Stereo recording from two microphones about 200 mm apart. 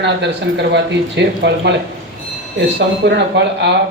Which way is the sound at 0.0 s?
60° right (ahead or behind).